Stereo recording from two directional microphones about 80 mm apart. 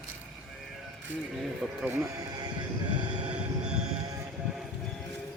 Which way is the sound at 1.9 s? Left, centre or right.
Right.